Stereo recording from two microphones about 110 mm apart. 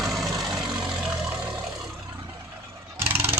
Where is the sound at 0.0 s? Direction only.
Centre (ahead or behind).